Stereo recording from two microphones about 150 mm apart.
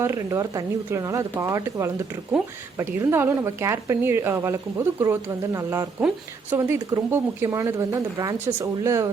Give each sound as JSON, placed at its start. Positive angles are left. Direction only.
{"t": 0.0, "sound": "speech", "side_deg": -20}